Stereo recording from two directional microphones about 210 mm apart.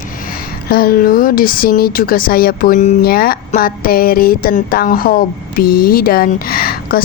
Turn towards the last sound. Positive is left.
turn(degrees=45)  # may be behind; listen again after turning